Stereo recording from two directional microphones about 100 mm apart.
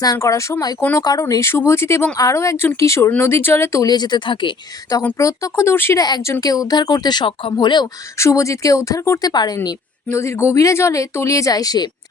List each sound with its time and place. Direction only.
0.0 s speech: 35° left (ahead or behind); by 4.5 s 55° left (ahead or behind)
5.1 s speech: 30° left (ahead or behind)
6.0 s speech: 45° left (ahead or behind)
7.3 s speech: 55° left (ahead or behind)
8.2 s speech: 30° left (ahead or behind)
9.6 s speech: 30° left (ahead or behind)